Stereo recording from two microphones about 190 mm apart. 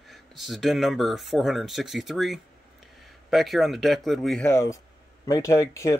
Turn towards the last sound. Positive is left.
turn(degrees=15)  # may be behind; listen again after turning